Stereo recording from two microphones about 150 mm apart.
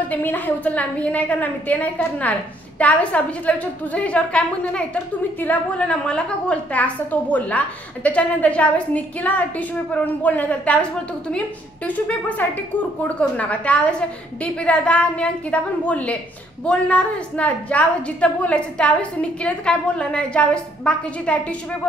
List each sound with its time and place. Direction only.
0.1 s a woman's voice: 10° left (ahead or behind)